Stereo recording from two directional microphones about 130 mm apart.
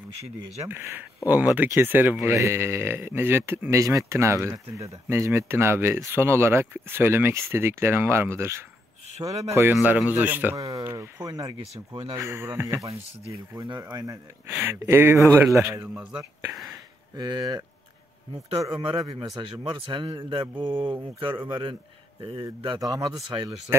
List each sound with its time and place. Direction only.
0.7 s speech: 15° right (ahead or behind)
11.9 s speech: 40° right (ahead or behind)
12.2 s speech: 20° right (ahead or behind)
13.3 s speech: 30° right (ahead or behind)
14.6 s speech: 15° right (ahead or behind)
15.9 s speech: 5° right (ahead or behind)
17.1 s speech: 30° right (ahead or behind)
18.7 s speech: 45° right (ahead or behind)
18.9 s speech: 30° right (ahead or behind)